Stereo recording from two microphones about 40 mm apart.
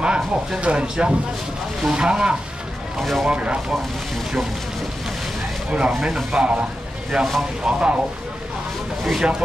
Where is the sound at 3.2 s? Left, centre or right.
Right.